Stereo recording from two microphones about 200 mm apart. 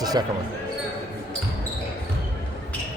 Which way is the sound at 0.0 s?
20° right (ahead or behind).